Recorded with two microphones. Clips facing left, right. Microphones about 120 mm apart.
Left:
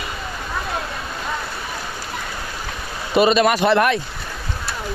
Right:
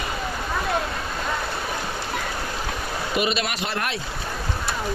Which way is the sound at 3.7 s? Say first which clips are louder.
Left 12 dB; 60° left (ahead or behind).